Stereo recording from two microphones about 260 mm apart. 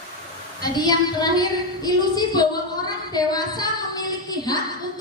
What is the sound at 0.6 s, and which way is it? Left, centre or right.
A woman's voice, centre.